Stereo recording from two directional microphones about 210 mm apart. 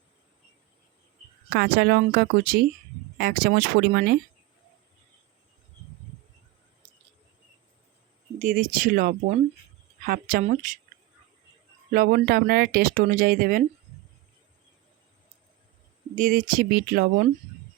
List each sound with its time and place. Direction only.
1.5 s speech: 50° right (ahead or behind)
8.4 s speech: 40° right (ahead or behind)
11.9 s speech: 45° right (ahead or behind)
16.1 s speech: 40° right (ahead or behind)